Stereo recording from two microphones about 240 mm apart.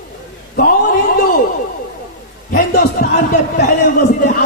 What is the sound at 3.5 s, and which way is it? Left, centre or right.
Speech, left.